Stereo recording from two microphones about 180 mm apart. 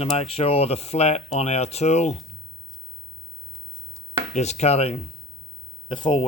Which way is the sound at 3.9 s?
40° left (ahead or behind).